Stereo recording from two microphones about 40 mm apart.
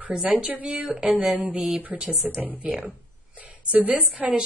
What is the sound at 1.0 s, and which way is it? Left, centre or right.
A woman's voice, right.